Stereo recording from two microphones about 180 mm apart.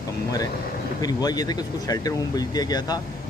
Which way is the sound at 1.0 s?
20° left (ahead or behind).